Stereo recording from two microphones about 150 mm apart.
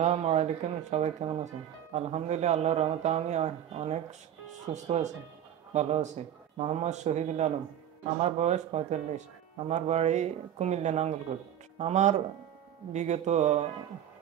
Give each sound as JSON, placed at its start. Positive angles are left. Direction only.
{"t": 0.0, "sound": "a man's voice", "side_deg": -45}